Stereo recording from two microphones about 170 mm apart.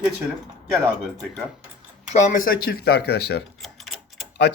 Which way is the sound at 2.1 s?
50° left (ahead or behind).